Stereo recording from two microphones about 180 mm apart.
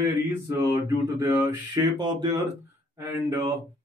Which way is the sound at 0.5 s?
20° right (ahead or behind).